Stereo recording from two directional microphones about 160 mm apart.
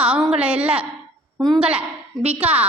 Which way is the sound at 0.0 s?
5° right (ahead or behind).